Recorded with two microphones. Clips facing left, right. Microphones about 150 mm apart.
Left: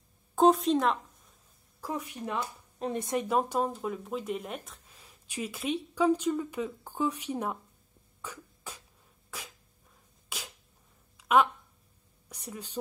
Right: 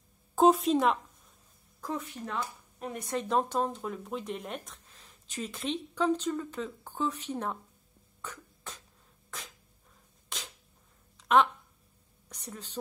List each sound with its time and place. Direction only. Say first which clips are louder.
0.4 s a woman's voice: even; centre (ahead or behind)
1.8 s speech: even; 10° left (ahead or behind)
2.8 s speech: left 4 dB; 25° left (ahead or behind)
3.3 s speech: right 1 dB; 10° left (ahead or behind)
8.2 s beatboxing: left 1 dB; 10° left (ahead or behind)
9.3 s sneeze: left 1 dB; 10° left (ahead or behind)
10.3 s cap gun: left 1 dB; 10° left (ahead or behind)
11.1 s a sound: even; 5° left (ahead or behind)